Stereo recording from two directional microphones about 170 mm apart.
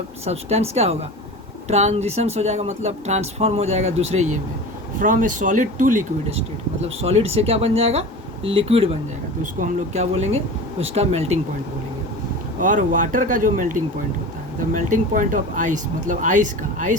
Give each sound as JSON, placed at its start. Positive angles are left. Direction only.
{"t": 0.3, "sound": "speech", "side_deg": -40}
{"t": 6.8, "sound": "speech", "side_deg": -35}
{"t": 12.5, "sound": "speech", "side_deg": -50}